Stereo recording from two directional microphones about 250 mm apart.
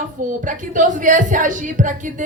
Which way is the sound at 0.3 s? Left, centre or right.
Right.